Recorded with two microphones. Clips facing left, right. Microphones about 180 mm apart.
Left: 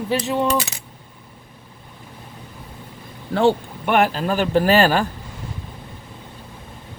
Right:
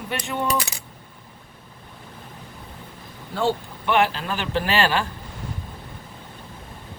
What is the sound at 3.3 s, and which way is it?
Speech, 60° left (ahead or behind).